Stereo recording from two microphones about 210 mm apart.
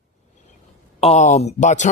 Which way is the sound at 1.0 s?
30° left (ahead or behind).